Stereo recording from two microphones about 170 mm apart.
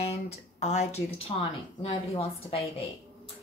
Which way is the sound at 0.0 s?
40° left (ahead or behind).